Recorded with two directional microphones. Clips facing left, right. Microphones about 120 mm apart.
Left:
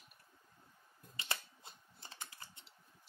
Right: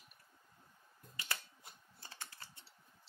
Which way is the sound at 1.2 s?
25° left (ahead or behind).